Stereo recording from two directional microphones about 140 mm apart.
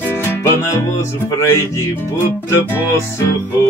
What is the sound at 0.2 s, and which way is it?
Music, 20° left (ahead or behind).